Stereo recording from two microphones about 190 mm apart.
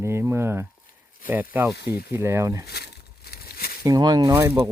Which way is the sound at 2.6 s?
55° left (ahead or behind).